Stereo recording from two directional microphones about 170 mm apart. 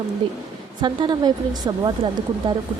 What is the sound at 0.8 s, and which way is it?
Speech, 25° right (ahead or behind).